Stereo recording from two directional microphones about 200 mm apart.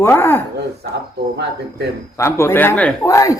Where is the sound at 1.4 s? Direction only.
55° right (ahead or behind).